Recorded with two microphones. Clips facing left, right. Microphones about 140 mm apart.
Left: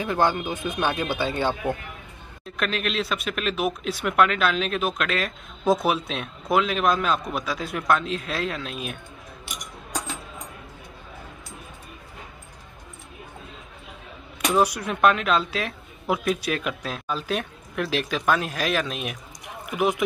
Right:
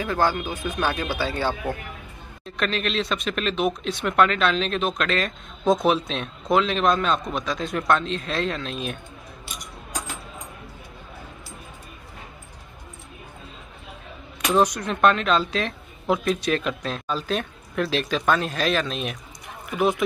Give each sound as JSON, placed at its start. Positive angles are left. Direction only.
{"t": 0.0, "sound": "speech", "side_deg": 20}
{"t": 2.4, "sound": "speech", "side_deg": 5}
{"t": 14.5, "sound": "speech", "side_deg": 5}